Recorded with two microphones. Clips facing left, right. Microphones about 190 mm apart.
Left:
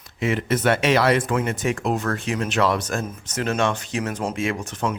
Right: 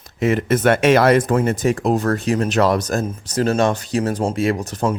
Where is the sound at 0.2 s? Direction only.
45° right (ahead or behind).